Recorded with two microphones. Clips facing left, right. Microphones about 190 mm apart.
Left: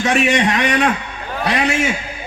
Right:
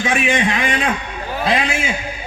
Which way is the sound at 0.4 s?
65° left (ahead or behind).